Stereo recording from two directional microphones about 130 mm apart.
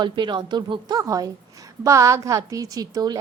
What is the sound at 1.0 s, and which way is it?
A woman's voice, 25° right (ahead or behind).